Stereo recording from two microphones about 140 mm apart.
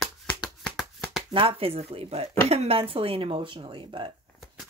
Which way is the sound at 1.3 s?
40° right (ahead or behind).